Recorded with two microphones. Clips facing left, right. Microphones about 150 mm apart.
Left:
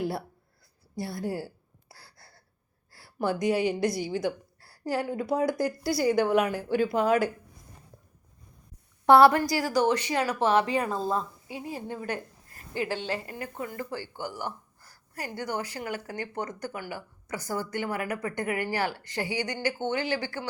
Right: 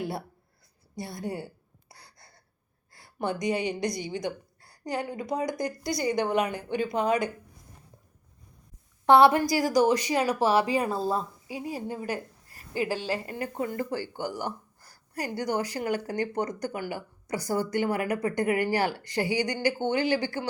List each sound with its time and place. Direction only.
0.9 s speech: centre (ahead or behind)
1.9 s gasp: 5° left (ahead or behind)
2.9 s a woman's voice: 5° left (ahead or behind)
9.1 s speech: 20° right (ahead or behind)
13.2 s speech: 30° right (ahead or behind)
13.9 s speech: 15° right (ahead or behind)
15.5 s speech: 35° right (ahead or behind)
16.6 s speech: 15° right (ahead or behind)